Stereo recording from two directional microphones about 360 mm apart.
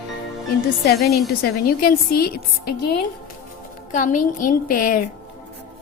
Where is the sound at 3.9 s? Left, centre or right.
Left.